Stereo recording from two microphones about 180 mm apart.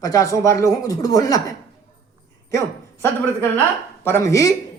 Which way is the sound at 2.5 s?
15° left (ahead or behind).